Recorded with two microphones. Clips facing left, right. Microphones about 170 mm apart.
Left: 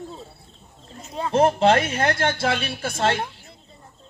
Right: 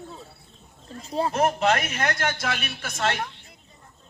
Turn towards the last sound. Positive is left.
turn(degrees=30)  # may be behind; listen again after turning